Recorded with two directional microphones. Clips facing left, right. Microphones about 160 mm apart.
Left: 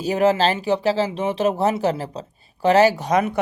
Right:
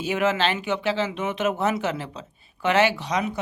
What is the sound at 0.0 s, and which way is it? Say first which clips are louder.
Speech: left 5 dB; 35° left (ahead or behind).